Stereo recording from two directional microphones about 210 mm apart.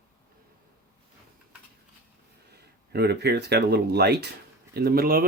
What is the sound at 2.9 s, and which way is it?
Speech, 50° right (ahead or behind).